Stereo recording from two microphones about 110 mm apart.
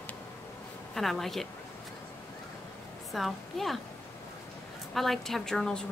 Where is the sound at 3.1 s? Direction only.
Centre (ahead or behind).